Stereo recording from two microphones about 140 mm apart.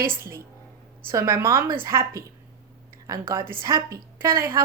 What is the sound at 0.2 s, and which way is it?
A woman's voice, 20° right (ahead or behind).